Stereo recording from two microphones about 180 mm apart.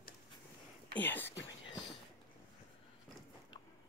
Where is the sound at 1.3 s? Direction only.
90° left.